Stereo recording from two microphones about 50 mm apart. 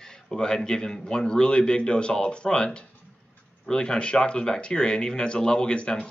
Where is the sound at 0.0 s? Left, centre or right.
Centre.